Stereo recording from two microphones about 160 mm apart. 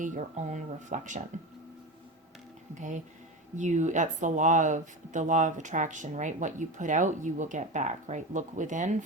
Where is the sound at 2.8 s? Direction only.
50° right (ahead or behind).